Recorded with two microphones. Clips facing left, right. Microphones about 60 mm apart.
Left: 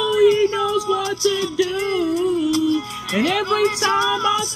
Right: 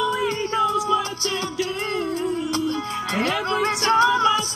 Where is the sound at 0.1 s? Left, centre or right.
Right.